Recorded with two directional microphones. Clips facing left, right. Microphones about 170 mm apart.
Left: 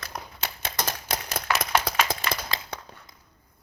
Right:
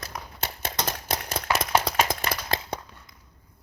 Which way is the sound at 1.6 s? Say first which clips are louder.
Right 2 dB; 25° right (ahead or behind).